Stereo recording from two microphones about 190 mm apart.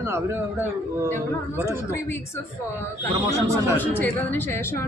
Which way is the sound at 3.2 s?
15° right (ahead or behind).